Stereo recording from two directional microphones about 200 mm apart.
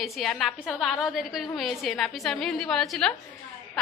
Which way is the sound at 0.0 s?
Centre (ahead or behind).